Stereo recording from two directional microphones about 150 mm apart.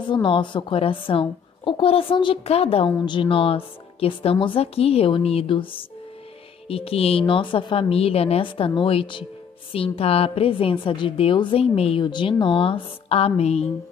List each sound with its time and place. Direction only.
0.1 s a woman's voice: 35° left (ahead or behind)
6.7 s a woman's voice: 40° left (ahead or behind)